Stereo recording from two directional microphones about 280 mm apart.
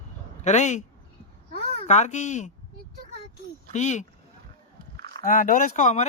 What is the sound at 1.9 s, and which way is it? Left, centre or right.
Speech, left.